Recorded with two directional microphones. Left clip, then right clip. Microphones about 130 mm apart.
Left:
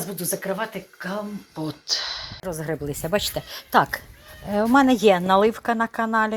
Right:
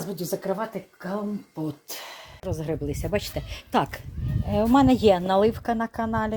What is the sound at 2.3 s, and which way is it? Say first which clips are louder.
Speech: left 2 dB; 10° right (ahead or behind).